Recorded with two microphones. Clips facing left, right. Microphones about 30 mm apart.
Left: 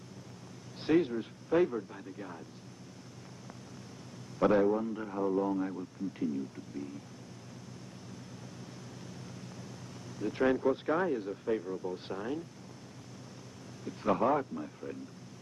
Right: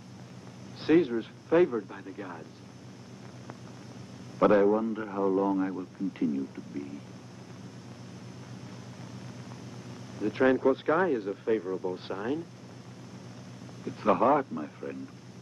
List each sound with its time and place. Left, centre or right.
0.7 s a man's voice: centre
4.4 s a man's voice: centre
10.1 s a man's voice: centre
13.8 s a man's voice: centre